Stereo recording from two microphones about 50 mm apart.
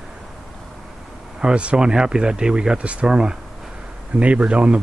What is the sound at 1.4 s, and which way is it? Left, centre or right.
Speech, right.